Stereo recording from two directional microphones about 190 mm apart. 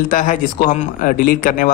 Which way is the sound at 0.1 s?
45° left (ahead or behind).